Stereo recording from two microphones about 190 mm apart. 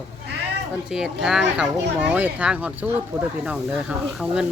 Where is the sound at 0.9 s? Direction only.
5° right (ahead or behind).